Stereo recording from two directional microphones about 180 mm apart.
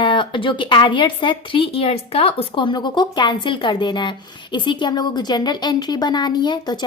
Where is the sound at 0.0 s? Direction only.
25° left (ahead or behind).